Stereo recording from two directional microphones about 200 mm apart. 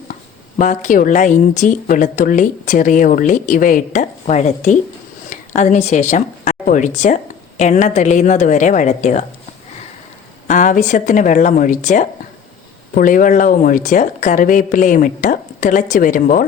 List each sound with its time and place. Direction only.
0.6 s a woman's voice: 40° left (ahead or behind)
10.5 s speech: 40° left (ahead or behind)